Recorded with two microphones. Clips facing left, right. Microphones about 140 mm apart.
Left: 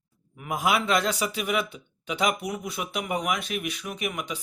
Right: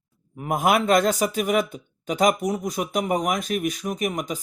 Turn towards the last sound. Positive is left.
turn(degrees=-40)  # may be behind; listen again after turning